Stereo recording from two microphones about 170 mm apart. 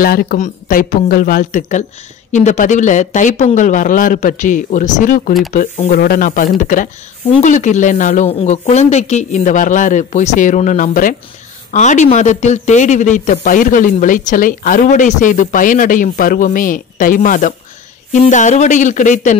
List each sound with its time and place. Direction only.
0.0 s a man's voice: 60° left (ahead or behind)